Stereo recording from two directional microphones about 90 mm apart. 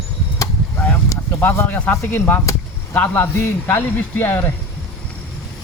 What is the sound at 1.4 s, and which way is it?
Speech, 20° left (ahead or behind).